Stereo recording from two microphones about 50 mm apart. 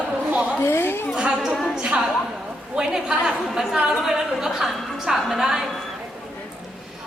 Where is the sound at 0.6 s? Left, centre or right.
Left.